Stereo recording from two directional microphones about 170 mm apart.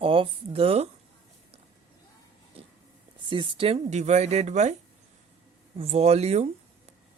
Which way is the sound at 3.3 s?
30° right (ahead or behind).